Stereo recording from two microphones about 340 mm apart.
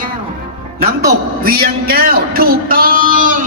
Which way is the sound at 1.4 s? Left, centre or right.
Right.